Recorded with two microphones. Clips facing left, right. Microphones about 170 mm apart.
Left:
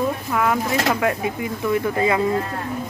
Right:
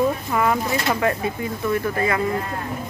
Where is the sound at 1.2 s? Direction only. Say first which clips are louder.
Left 1 dB; 15° left (ahead or behind).